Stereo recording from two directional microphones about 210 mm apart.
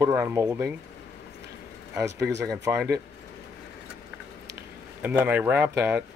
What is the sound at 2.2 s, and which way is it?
Speech, 55° right (ahead or behind).